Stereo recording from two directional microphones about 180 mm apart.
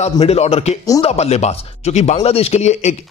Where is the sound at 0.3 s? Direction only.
35° left (ahead or behind).